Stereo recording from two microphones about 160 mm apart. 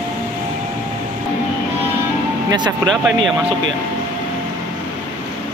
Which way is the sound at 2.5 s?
25° right (ahead or behind).